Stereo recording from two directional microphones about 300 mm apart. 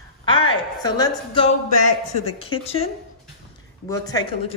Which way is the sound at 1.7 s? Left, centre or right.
Left.